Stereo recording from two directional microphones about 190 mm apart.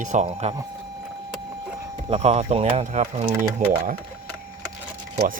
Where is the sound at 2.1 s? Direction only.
35° right (ahead or behind).